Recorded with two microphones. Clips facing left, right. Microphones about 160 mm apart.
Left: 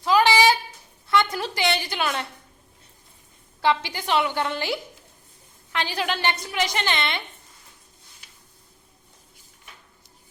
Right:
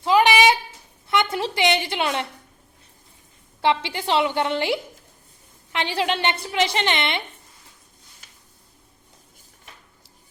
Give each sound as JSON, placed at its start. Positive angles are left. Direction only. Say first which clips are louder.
{"t": 0.0, "sound": "a sound", "louder": "right 1 dB", "side_deg": -20}
{"t": 1.0, "sound": "a woman's voice", "louder": "even", "side_deg": -20}
{"t": 3.6, "sound": "a woman's voice", "louder": "right 1 dB", "side_deg": -25}